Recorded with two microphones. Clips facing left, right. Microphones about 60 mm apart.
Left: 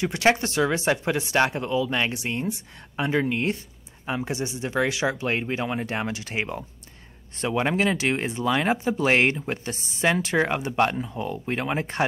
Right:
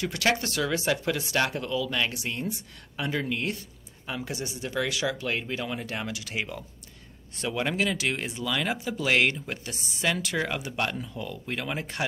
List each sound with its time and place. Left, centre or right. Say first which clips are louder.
0.0 s speech: left 5 dB; left